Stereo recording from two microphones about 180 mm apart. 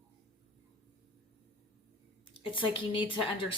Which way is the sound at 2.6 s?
30° left (ahead or behind).